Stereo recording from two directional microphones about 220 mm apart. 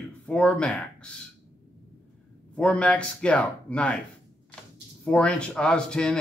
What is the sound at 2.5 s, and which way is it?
Speech, 5° left (ahead or behind).